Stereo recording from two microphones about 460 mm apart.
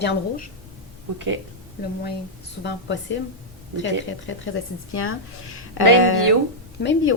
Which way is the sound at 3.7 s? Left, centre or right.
Left.